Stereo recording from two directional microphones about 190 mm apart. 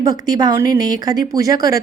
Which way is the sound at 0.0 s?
20° right (ahead or behind).